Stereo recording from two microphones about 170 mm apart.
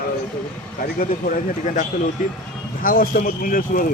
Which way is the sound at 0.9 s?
50° left (ahead or behind).